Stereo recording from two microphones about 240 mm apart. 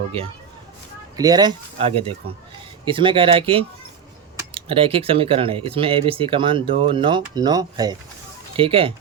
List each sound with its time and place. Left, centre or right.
1.1 s speech: centre